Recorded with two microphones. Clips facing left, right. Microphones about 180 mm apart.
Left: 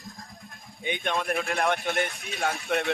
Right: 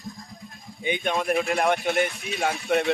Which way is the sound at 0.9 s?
Centre (ahead or behind).